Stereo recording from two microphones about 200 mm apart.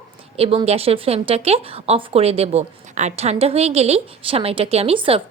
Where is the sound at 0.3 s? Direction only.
30° right (ahead or behind).